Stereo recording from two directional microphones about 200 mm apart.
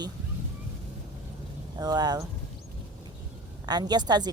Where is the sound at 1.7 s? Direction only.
20° right (ahead or behind).